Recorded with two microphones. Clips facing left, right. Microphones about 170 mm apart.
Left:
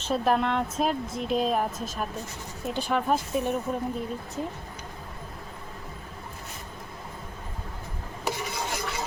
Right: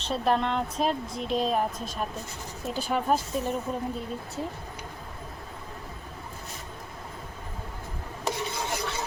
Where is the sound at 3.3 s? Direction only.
10° left (ahead or behind).